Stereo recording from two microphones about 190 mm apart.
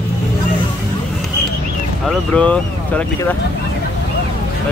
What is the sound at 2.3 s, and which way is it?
Speech, 5° left (ahead or behind).